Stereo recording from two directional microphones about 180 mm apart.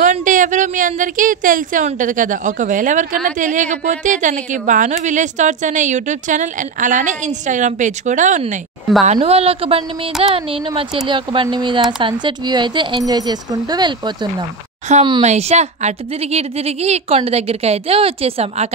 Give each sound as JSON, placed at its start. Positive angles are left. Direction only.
{"t": 0.0, "sound": "a woman's voice", "side_deg": -45}
{"t": 14.9, "sound": "a woman's voice", "side_deg": -40}